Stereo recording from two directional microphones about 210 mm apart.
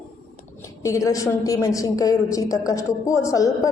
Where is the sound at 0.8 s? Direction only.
15° left (ahead or behind).